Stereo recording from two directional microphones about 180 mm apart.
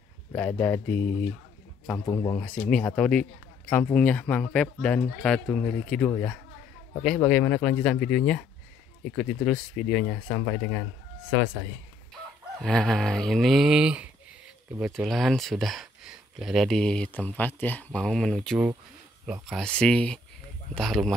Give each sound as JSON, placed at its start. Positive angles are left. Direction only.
{"t": 0.3, "sound": "speech", "side_deg": 10}
{"t": 12.6, "sound": "speech", "side_deg": 5}